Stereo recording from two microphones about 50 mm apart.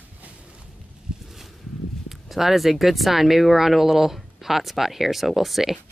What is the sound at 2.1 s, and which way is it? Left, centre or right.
Speech, centre.